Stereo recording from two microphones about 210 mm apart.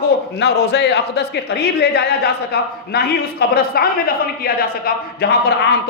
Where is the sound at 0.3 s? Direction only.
55° left (ahead or behind).